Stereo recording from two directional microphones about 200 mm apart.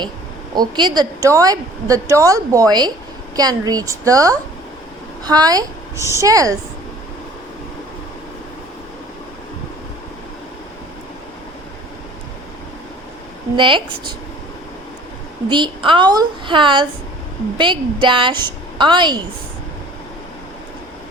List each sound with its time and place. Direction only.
0.5 s a woman's voice: 20° right (ahead or behind)
13.6 s a woman's voice: 25° right (ahead or behind)
15.4 s a woman's voice: 25° right (ahead or behind)